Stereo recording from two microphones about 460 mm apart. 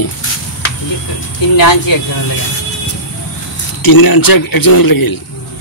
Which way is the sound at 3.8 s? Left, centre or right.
Left.